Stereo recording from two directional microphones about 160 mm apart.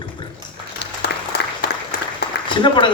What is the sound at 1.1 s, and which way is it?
Applause, 90° left.